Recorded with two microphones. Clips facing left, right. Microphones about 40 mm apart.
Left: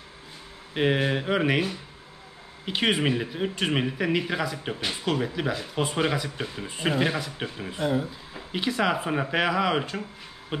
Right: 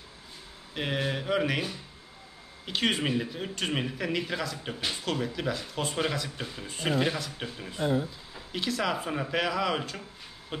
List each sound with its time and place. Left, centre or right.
0.7 s speech: left